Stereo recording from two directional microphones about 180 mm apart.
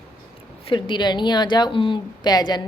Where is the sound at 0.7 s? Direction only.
25° left (ahead or behind).